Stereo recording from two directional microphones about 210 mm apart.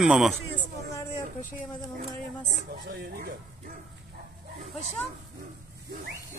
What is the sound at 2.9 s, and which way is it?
Speech, 45° right (ahead or behind).